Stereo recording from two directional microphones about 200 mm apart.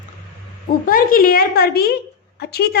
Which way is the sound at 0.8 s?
45° left (ahead or behind).